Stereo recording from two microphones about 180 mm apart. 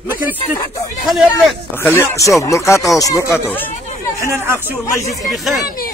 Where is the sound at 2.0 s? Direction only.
15° left (ahead or behind).